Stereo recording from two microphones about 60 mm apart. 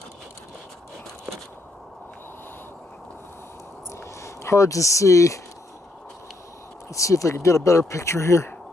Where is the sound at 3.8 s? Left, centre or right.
Left.